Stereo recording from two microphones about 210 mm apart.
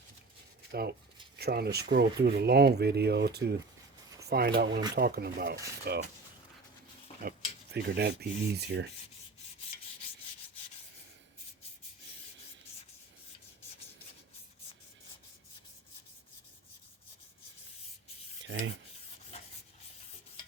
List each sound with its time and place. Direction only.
0.7 s speech: 50° right (ahead or behind)
7.2 s cutlery: 45° right (ahead or behind)
8.2 s speech: 50° right (ahead or behind)